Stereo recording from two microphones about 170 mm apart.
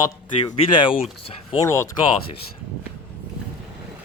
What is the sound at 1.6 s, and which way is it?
Speech, 15° left (ahead or behind).